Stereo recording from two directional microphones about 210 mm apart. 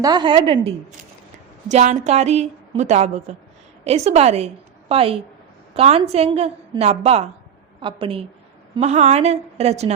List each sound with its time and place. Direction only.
0.0 s a woman's voice: 20° right (ahead or behind)